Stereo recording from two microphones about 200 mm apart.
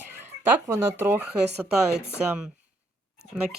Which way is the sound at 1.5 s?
55° right (ahead or behind).